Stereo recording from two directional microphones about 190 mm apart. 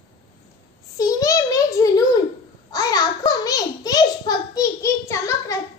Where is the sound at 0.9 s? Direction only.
20° left (ahead or behind).